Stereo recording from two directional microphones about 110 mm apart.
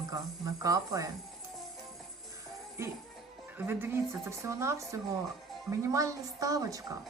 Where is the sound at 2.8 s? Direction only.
25° right (ahead or behind).